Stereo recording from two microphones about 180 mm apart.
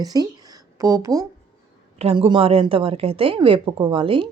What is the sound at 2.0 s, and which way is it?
Speech, 30° right (ahead or behind).